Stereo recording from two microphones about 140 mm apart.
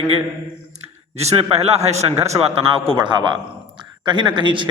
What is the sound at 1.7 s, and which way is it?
Speech, 50° right (ahead or behind).